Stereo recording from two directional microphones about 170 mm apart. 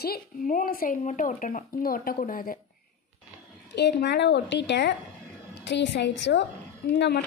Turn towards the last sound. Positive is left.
turn(degrees=70)  # may be behind; listen again after turning